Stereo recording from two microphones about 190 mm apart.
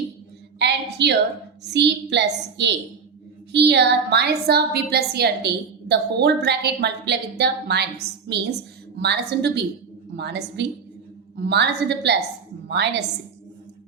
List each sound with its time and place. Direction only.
0.6 s a woman's voice: 60° right (ahead or behind)